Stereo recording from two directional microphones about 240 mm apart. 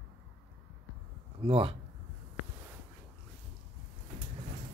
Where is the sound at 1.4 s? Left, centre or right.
Right.